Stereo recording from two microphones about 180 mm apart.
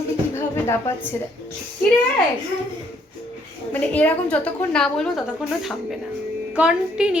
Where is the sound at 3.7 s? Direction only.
10° left (ahead or behind).